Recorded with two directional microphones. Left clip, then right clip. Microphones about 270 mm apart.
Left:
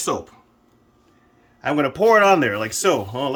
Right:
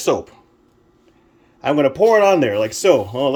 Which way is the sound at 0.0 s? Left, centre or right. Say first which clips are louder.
Right 6 dB; centre.